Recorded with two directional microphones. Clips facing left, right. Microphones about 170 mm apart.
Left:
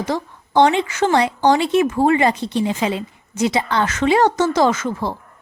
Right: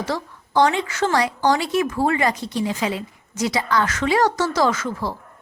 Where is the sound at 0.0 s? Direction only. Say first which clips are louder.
Left 3 dB; 20° left (ahead or behind).